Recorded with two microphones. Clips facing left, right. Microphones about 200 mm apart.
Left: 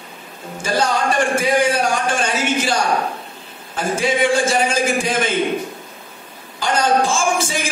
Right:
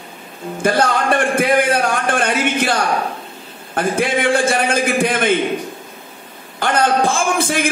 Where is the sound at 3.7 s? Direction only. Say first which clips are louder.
Right 2 dB; 55° right (ahead or behind).